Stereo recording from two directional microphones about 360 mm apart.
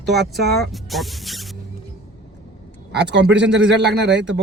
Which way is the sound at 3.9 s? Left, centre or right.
Right.